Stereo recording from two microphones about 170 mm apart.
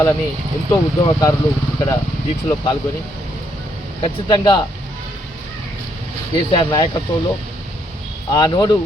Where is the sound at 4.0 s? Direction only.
30° left (ahead or behind).